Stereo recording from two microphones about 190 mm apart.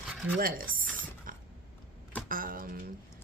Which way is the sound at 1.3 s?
45° right (ahead or behind).